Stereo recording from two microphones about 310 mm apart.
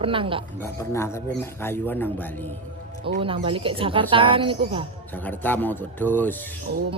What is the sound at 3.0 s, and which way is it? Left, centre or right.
Speech, centre.